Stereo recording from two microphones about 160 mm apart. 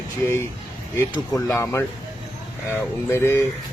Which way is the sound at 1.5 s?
15° left (ahead or behind).